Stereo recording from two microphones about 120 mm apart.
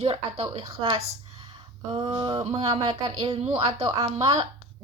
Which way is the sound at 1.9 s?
35° right (ahead or behind).